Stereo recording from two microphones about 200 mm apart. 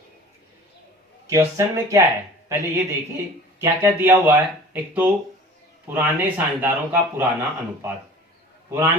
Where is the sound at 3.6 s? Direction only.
10° right (ahead or behind).